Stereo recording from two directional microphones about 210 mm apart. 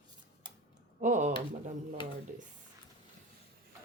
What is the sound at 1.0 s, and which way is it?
Drawer open or close, 35° right (ahead or behind).